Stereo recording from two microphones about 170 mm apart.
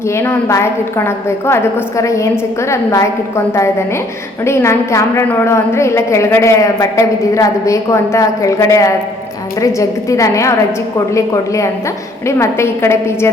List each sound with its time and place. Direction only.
0.1 s a woman's voice: 15° left (ahead or behind)